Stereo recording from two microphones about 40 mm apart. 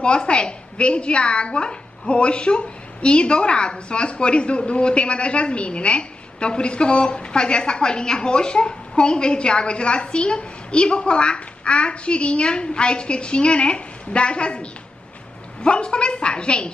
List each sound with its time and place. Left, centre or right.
0.0 s a woman's voice: left